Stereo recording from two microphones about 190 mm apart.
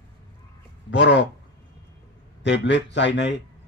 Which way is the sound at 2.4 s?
70° left (ahead or behind).